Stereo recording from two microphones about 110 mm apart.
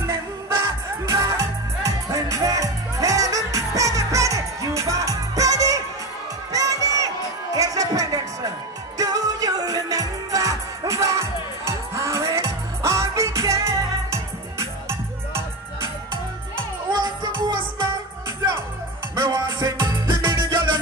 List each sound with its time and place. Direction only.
1.0 s music: 30° right (ahead or behind)
6.5 s crowd: 30° right (ahead or behind)
7.5 s music: 30° right (ahead or behind)
16.9 s music: 45° right (ahead or behind)
19.2 s music: 30° right (ahead or behind)